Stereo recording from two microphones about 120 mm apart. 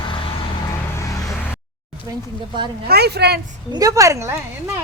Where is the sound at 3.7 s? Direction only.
30° right (ahead or behind).